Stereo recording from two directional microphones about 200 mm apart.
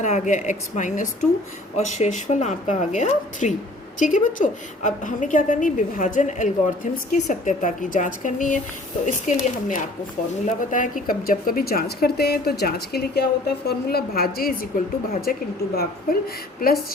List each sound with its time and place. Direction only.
0.0 s a woman's voice: 40° left (ahead or behind)